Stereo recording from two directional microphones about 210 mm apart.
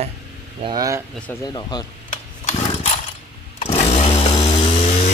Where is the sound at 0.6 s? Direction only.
15° right (ahead or behind).